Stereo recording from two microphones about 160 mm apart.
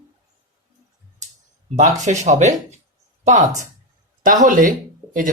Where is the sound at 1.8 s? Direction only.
50° right (ahead or behind).